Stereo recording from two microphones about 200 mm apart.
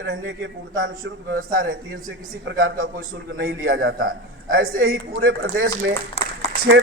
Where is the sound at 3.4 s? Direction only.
55° right (ahead or behind).